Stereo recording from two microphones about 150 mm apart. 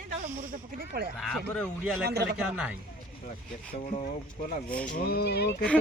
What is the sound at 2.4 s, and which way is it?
Speech, 5° right (ahead or behind).